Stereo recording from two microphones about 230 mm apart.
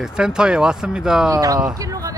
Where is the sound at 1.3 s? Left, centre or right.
Centre.